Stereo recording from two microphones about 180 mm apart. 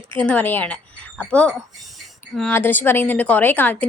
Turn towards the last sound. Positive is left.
turn(degrees=10)  # may be behind; listen again after turning